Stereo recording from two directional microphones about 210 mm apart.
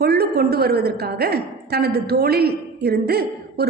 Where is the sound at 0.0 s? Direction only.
50° right (ahead or behind).